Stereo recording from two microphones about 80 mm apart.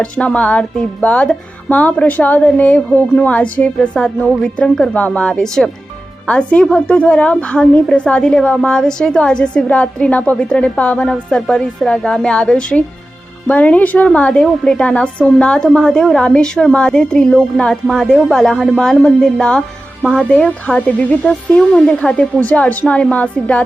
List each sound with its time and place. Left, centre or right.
0.0 s a woman's voice: centre